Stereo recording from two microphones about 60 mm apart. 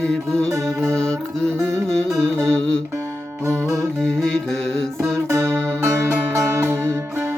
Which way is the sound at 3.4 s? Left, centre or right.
Right.